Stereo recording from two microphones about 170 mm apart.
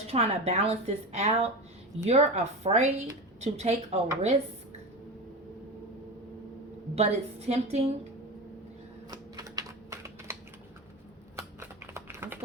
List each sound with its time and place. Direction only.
0.1 s a woman's voice: 35° right (ahead or behind)
6.9 s a woman's voice: 40° right (ahead or behind)
9.0 s typewriter: 20° right (ahead or behind)
11.3 s typing: 15° right (ahead or behind)